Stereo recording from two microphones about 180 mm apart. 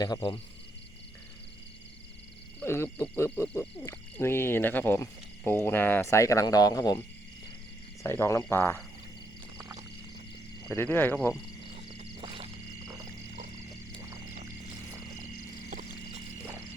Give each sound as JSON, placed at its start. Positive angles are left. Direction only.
{"t": 0.0, "sound": "speech", "side_deg": 25}
{"t": 2.6, "sound": "speech", "side_deg": 15}
{"t": 8.0, "sound": "speech", "side_deg": 15}
{"t": 9.6, "sound": "a sound", "side_deg": -10}
{"t": 10.7, "sound": "speech", "side_deg": 10}
{"t": 12.2, "sound": "music", "side_deg": -30}